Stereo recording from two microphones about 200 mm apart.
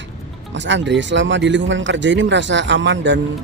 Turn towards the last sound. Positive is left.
turn(degrees=-65)  # may be behind; listen again after turning